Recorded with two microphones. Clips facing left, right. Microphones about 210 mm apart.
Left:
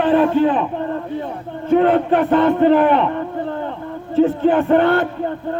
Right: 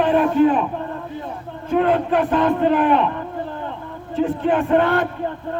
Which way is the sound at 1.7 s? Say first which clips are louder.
Left 4 dB; 30° left (ahead or behind).